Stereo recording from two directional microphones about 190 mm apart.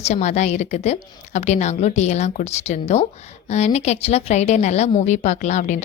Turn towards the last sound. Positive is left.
turn(degrees=40)  # may be behind; listen again after turning